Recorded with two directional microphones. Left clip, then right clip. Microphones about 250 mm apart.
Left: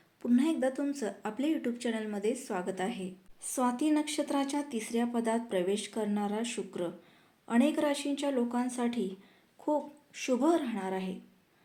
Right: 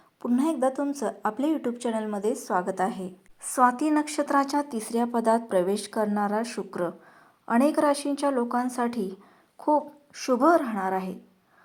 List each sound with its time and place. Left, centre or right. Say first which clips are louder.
0.2 s a woman's voice: right 4 dB; centre
3.5 s speech: right 8 dB; centre
4.4 s a woman's voice: right 7 dB; centre
5.5 s a woman's voice: right 7 dB; right
6.2 s a woman's voice: right 7 dB; centre